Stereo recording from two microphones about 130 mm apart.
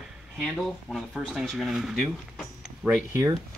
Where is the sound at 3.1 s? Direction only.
30° right (ahead or behind).